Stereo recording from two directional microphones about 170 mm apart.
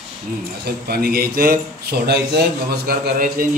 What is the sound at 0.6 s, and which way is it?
Speech, 65° right (ahead or behind).